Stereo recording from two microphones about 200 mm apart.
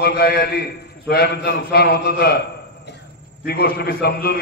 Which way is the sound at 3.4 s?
50° left (ahead or behind).